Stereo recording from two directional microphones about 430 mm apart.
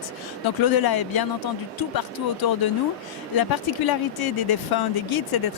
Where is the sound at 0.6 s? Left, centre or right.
Left.